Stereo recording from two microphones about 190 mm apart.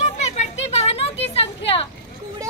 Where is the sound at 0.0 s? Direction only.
35° left (ahead or behind).